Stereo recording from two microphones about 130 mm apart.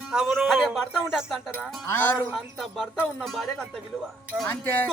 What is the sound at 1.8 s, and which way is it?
Speech, 15° left (ahead or behind).